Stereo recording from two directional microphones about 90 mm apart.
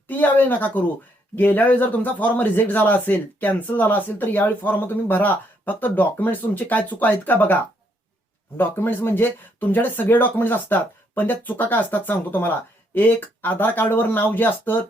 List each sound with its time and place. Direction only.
0.1 s speech: 20° left (ahead or behind)